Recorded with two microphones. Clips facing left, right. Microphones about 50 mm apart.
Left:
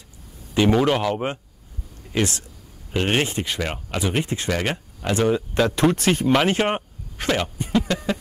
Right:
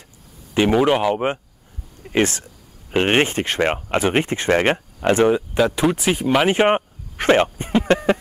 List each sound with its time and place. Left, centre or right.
0.6 s speech: centre
2.1 s speech: right
5.6 s speech: centre
6.5 s speech: right
7.2 s speech: right